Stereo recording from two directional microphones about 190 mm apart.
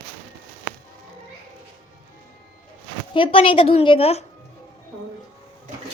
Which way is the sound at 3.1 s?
30° left (ahead or behind).